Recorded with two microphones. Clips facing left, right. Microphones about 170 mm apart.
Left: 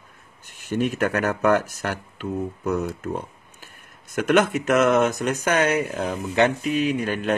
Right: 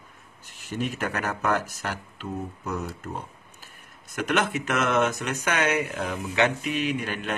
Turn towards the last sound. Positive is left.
turn(degrees=40)  # may be behind; listen again after turning